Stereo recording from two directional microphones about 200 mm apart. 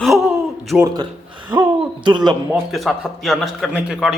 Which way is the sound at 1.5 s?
20° right (ahead or behind).